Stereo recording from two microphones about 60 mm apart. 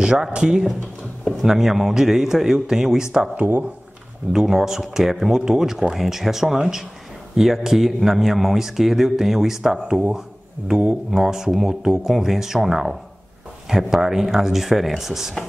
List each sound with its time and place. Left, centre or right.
0.0 s speech: centre
4.3 s a man's voice: centre